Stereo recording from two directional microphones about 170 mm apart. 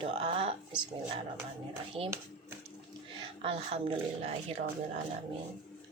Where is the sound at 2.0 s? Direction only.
30° right (ahead or behind).